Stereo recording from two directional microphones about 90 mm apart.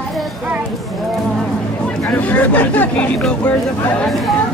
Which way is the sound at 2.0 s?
15° left (ahead or behind).